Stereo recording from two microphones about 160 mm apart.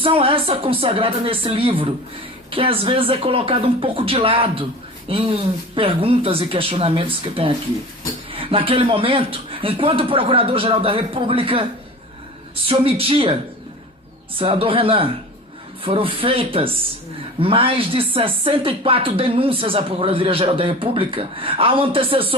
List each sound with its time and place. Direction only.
0.0 s speech: 35° right (ahead or behind)
12.6 s speech: 35° right (ahead or behind)
14.3 s speech: 35° right (ahead or behind)